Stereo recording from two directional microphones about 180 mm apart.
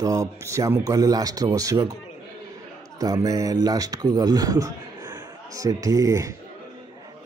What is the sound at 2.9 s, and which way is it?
A man's voice, 20° right (ahead or behind).